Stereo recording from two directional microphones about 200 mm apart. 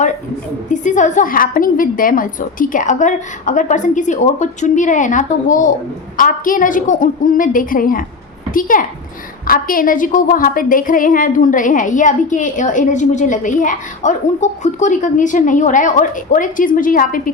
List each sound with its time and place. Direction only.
0.7 s a woman's voice: 40° left (ahead or behind)